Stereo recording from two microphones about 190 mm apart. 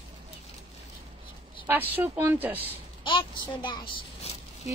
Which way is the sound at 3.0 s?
25° left (ahead or behind).